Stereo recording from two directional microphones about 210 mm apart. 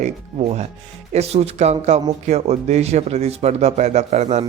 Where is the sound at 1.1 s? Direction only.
30° right (ahead or behind).